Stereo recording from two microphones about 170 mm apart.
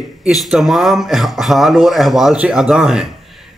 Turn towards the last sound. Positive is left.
turn(degrees=0)  # may be behind; listen again after turning